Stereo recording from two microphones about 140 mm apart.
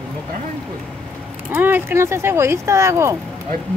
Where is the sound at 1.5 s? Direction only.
15° right (ahead or behind).